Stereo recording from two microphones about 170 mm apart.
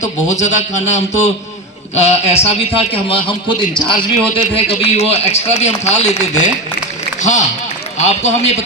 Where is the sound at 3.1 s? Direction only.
30° left (ahead or behind).